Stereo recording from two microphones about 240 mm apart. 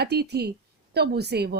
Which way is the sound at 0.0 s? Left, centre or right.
Right.